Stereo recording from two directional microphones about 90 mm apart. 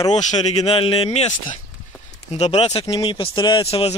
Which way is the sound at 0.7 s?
90° left.